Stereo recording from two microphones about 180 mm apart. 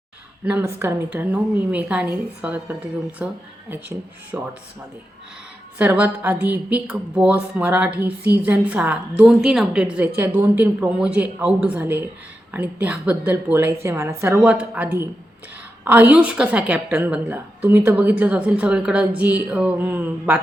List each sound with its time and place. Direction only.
0.4 s a woman's voice: 10° right (ahead or behind)
5.7 s a woman's voice: 10° right (ahead or behind)